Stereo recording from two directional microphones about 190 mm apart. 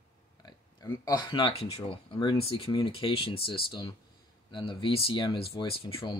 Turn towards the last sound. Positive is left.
turn(degrees=30)  # may be behind; listen again after turning